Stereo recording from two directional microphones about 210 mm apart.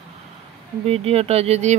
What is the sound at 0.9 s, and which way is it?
Speech, 30° right (ahead or behind).